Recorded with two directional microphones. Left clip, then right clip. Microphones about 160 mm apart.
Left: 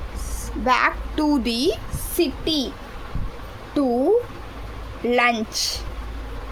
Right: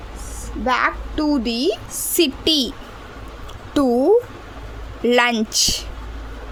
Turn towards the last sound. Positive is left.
turn(degrees=-45)  # may be behind; listen again after turning